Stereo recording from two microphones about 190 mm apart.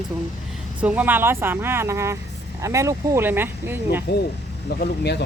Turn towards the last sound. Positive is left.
turn(degrees=60)  # may be behind; listen again after turning